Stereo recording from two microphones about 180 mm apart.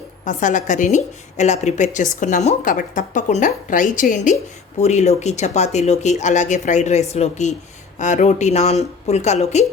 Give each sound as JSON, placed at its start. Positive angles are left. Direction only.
{"t": 0.3, "sound": "a woman's voice", "side_deg": 45}